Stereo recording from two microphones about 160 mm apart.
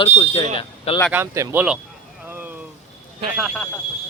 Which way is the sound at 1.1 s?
15° right (ahead or behind).